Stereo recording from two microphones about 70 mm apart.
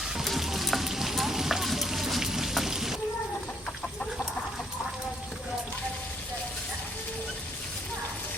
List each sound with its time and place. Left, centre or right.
0.2 s frying: centre